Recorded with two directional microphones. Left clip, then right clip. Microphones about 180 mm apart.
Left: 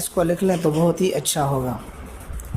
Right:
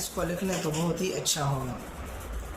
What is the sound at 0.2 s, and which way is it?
Speech, 35° left (ahead or behind).